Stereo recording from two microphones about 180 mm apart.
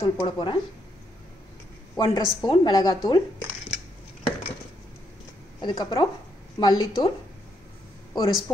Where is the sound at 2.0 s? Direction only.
25° left (ahead or behind).